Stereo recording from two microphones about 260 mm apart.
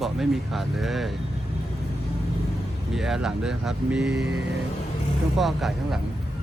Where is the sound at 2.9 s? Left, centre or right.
Centre.